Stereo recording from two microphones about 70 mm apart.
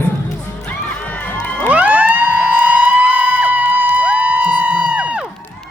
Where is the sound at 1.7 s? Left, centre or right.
Right.